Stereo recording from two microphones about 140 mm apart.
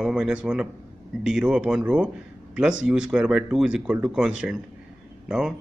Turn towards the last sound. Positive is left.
turn(degrees=-5)  # may be behind; listen again after turning